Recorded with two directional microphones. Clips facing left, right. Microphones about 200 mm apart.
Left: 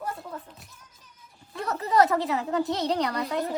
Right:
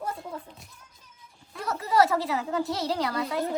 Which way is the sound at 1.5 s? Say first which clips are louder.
Left 1 dB; centre (ahead or behind).